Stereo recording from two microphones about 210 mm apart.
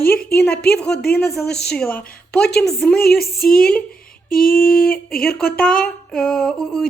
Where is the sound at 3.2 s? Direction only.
50° left (ahead or behind).